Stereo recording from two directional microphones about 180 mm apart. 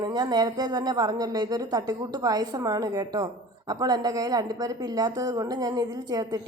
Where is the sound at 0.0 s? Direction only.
20° right (ahead or behind).